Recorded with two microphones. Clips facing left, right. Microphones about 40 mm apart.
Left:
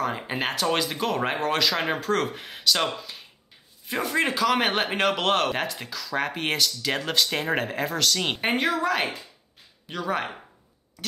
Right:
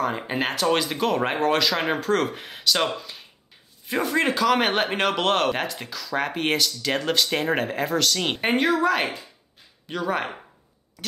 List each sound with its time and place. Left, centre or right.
0.0 s speech: centre